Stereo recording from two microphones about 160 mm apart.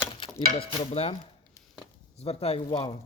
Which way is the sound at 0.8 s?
40° left (ahead or behind).